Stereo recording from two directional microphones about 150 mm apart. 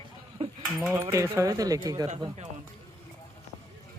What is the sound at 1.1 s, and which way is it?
Speech, 20° right (ahead or behind).